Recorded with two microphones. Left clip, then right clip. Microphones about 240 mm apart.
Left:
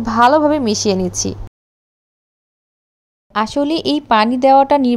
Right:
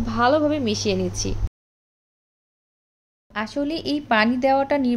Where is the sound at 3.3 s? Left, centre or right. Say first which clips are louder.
Left 9 dB; left.